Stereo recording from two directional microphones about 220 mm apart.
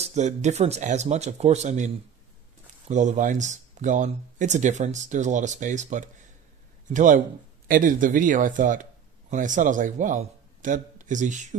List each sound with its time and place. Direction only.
0.0 s speech: 30° right (ahead or behind)
2.9 s a man's voice: 35° right (ahead or behind)